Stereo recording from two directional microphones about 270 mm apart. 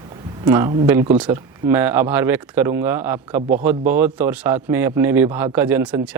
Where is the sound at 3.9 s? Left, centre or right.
Centre.